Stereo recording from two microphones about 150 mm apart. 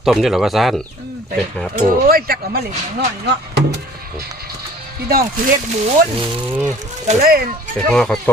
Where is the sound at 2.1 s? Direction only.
90° right.